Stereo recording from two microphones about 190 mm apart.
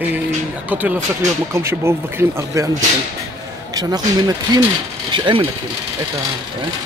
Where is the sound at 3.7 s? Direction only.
20° right (ahead or behind).